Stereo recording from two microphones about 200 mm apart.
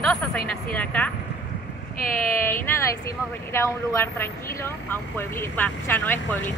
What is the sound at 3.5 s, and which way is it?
Speech, 15° left (ahead or behind).